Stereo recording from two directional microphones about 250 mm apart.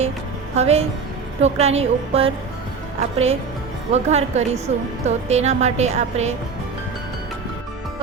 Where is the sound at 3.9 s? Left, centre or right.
Right.